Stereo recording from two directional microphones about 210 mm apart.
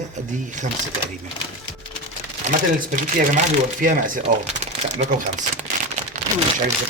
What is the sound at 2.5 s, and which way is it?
Speech, 40° right (ahead or behind).